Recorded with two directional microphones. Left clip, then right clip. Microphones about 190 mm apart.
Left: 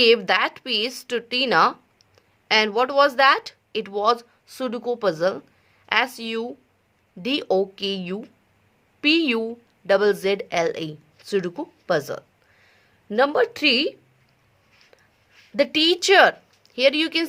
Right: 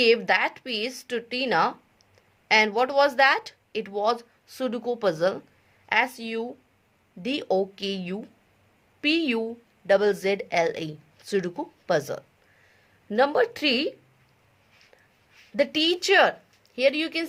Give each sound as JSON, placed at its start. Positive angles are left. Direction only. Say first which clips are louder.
{"t": 0.0, "sound": "speech", "louder": "left 3 dB", "side_deg": 20}
{"t": 5.8, "sound": "a woman's voice", "louder": "left 2 dB", "side_deg": 20}
{"t": 15.5, "sound": "a woman's voice", "louder": "left 4 dB", "side_deg": 20}